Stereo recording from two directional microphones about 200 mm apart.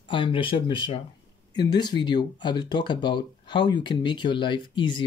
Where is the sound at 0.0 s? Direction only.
25° left (ahead or behind).